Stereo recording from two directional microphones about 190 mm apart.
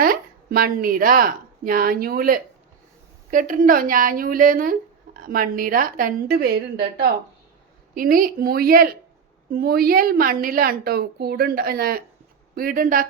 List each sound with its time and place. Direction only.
0.0 s a woman's voice: 50° right (ahead or behind)